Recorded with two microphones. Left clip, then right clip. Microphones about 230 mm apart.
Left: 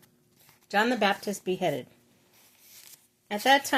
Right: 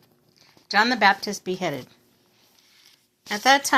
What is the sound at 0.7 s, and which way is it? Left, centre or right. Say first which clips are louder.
A woman's voice: right 6 dB; centre.